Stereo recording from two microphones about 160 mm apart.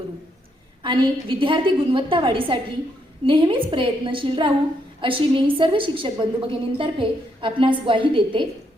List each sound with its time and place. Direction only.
0.8 s a woman's voice: 30° right (ahead or behind)